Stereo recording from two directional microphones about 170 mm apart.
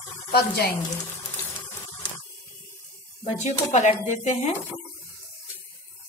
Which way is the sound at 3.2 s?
40° left (ahead or behind).